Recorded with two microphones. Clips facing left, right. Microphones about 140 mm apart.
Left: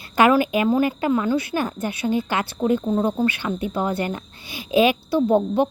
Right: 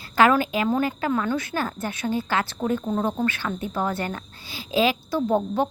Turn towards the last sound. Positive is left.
turn(degrees=15)  # may be behind; listen again after turning